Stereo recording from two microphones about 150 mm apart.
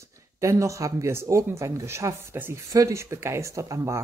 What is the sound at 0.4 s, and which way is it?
Speech, 20° right (ahead or behind).